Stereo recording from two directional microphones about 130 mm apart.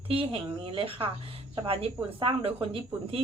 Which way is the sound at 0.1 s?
45° right (ahead or behind).